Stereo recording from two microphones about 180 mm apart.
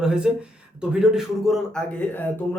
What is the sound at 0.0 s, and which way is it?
Speech, 5° right (ahead or behind).